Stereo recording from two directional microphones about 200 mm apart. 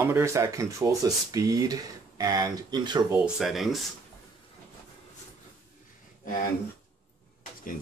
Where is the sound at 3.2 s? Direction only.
Centre (ahead or behind).